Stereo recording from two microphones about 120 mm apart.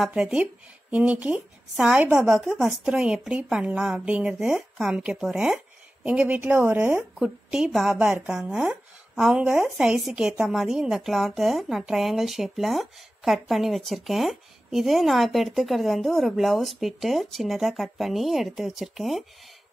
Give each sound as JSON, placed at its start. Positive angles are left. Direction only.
{"t": 0.0, "sound": "a woman's voice", "side_deg": -5}
{"t": 2.3, "sound": "a woman's voice", "side_deg": -5}